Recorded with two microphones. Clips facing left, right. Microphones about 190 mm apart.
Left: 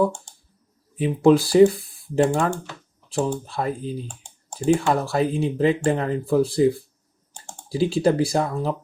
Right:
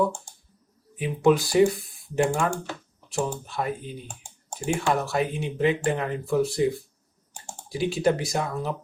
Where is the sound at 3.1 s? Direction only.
35° left (ahead or behind).